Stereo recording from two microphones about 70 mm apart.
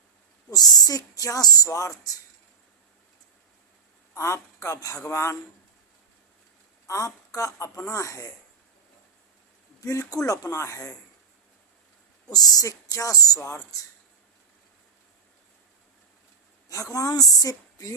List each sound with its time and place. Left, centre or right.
0.5 s speech: left
4.1 s speech: left
6.8 s speech: left
9.8 s speech: left
12.3 s speech: left
12.6 s speech: left
16.6 s a woman's voice: left